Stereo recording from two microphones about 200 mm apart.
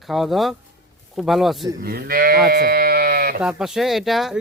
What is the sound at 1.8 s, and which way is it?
Sheep, 50° right (ahead or behind).